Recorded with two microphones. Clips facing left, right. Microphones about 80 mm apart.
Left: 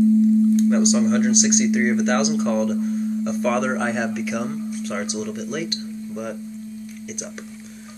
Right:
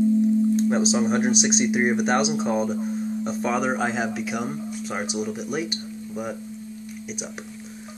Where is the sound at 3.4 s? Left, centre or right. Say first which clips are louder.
Left 1 dB; centre.